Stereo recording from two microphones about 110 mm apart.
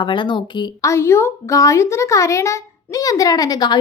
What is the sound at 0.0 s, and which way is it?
Speech, 45° left (ahead or behind).